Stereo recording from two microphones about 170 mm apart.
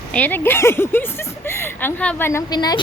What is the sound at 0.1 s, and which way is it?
Speech, 10° left (ahead or behind).